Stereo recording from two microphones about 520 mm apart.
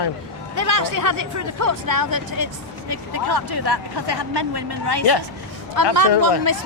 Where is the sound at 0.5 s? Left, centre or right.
Right.